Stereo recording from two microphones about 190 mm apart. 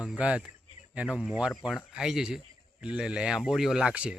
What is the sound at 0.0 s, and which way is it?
Speech, 5° right (ahead or behind).